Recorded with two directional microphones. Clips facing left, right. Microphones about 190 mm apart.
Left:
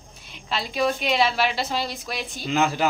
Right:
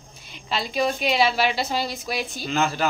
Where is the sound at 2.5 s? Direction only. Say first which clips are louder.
Left 2 dB; 15° left (ahead or behind).